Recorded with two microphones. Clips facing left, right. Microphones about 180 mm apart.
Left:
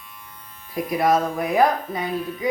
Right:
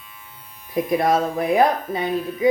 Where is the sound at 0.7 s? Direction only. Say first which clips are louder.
Right 2 dB; 25° right (ahead or behind).